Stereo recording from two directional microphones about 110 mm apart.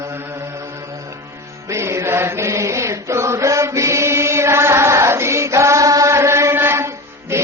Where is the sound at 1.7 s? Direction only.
25° right (ahead or behind).